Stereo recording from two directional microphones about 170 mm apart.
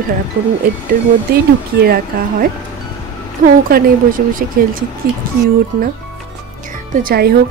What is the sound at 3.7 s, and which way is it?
Speech, 60° right (ahead or behind).